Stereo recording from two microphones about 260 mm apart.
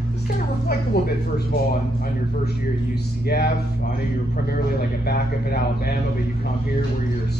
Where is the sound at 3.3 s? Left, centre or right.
Left.